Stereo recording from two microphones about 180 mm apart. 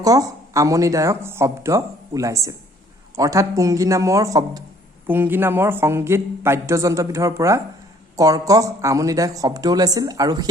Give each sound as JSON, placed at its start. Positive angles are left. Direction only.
{"t": 0.0, "sound": "speech", "side_deg": -20}